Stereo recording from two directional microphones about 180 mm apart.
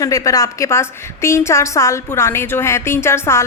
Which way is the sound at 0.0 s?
20° left (ahead or behind).